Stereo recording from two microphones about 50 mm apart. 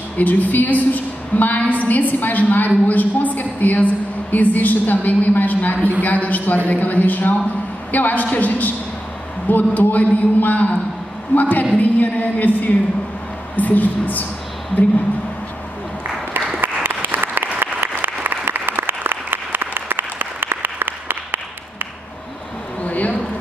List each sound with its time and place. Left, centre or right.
0.2 s a woman's voice: left
16.8 s applause: right
22.8 s a sound: left